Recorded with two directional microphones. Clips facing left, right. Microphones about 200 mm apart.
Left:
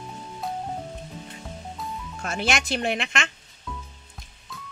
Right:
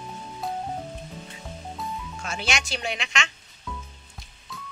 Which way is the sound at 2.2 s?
55° left (ahead or behind).